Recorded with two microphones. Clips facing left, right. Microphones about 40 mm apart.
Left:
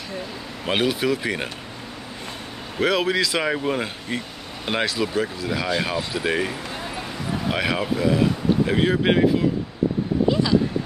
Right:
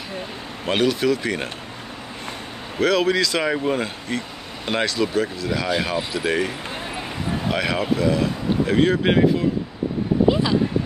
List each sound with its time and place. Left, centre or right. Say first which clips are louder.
0.7 s speech: right 2 dB; centre
2.8 s speech: right 2 dB; centre
10.3 s speech: left 1 dB; centre